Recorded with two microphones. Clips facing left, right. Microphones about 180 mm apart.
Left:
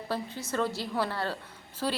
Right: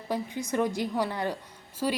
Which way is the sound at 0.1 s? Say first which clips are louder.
Right 4 dB; 15° right (ahead or behind).